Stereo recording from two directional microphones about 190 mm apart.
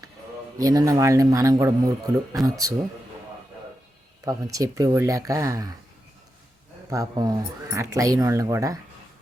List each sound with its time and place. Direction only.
0.6 s speech: 20° right (ahead or behind)
4.3 s speech: 15° right (ahead or behind)
6.9 s speech: 20° right (ahead or behind)